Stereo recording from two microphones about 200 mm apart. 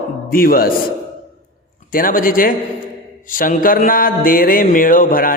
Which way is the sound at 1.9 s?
45° left (ahead or behind).